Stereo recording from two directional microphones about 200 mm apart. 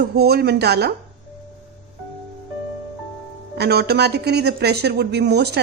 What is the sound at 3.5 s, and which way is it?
Speech, 55° right (ahead or behind).